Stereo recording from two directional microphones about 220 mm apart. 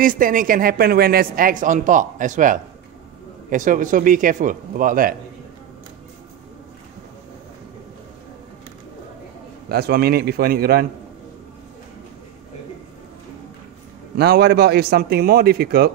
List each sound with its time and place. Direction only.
0.0 s a man's voice: 40° right (ahead or behind)
9.7 s a man's voice: 45° right (ahead or behind)
14.1 s a man's voice: 45° right (ahead or behind)